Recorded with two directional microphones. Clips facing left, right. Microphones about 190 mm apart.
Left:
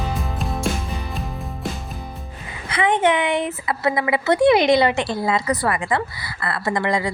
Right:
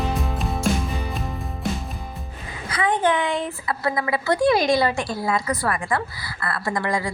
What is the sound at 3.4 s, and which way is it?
Speech, 20° left (ahead or behind).